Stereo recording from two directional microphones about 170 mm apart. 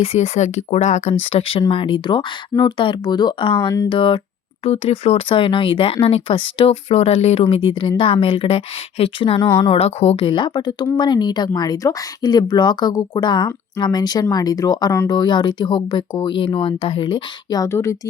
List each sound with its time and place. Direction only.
0.0 s speech: 35° left (ahead or behind); by 18.1 s 15° left (ahead or behind)